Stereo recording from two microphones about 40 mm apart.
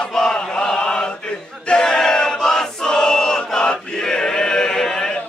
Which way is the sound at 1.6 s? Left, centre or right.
Left.